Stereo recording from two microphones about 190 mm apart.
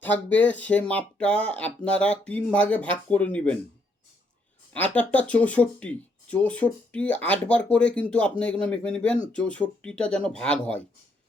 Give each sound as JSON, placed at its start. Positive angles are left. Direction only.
{"t": 0.0, "sound": "speech", "side_deg": 10}
{"t": 4.7, "sound": "speech", "side_deg": 5}